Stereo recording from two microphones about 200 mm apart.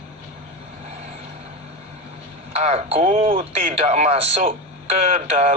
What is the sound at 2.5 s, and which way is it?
Speech, 30° right (ahead or behind).